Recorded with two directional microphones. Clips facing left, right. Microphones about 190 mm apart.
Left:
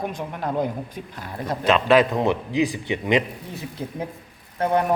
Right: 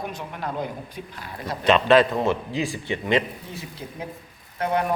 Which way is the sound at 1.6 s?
5° left (ahead or behind).